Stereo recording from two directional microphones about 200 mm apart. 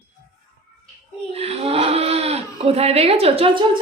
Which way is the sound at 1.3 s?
30° right (ahead or behind).